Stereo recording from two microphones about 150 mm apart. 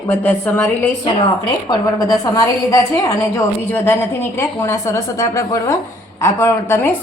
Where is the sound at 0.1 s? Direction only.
15° left (ahead or behind).